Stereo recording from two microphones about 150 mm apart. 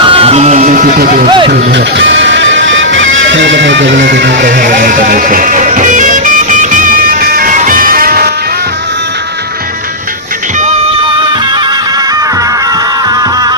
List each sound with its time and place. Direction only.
0.0 s music: 35° right (ahead or behind); by 1.3 s 65° right (ahead or behind)
4.4 s music: 60° right (ahead or behind)
13.1 s music: 25° right (ahead or behind)